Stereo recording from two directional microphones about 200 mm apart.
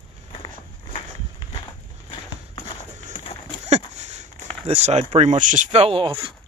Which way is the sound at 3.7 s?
35° right (ahead or behind).